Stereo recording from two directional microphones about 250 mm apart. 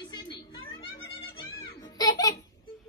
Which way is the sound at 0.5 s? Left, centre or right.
Centre.